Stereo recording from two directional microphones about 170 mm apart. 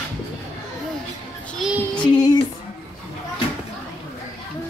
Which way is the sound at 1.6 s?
5° right (ahead or behind).